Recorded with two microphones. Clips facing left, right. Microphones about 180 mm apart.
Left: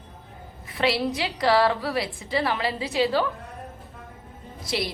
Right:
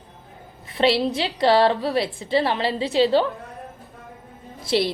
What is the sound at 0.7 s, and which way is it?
A woman's voice, 25° right (ahead or behind).